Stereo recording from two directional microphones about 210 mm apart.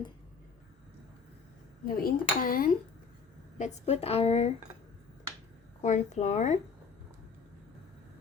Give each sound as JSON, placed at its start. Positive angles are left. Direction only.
{"t": 1.8, "sound": "dishes", "side_deg": 45}
{"t": 3.6, "sound": "a woman's voice", "side_deg": 30}
{"t": 5.8, "sound": "speech", "side_deg": 35}